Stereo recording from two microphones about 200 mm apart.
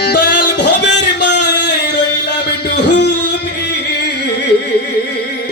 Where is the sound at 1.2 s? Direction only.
60° left (ahead or behind).